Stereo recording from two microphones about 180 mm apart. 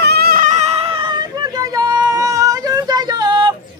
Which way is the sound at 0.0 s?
60° right (ahead or behind).